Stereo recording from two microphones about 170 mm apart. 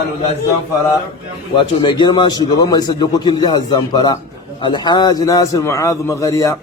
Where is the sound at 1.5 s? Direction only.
30° left (ahead or behind).